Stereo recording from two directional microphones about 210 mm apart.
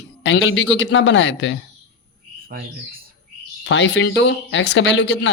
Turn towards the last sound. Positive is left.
turn(degrees=60)  # may be behind; listen again after turning